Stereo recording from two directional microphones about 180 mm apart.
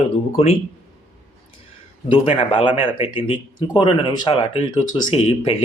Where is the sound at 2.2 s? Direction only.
30° left (ahead or behind).